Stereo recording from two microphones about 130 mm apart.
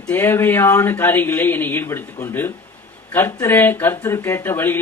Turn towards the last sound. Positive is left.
turn(degrees=15)  # may be behind; listen again after turning